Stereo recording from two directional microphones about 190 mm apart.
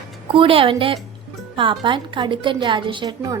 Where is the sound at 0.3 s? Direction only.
30° right (ahead or behind).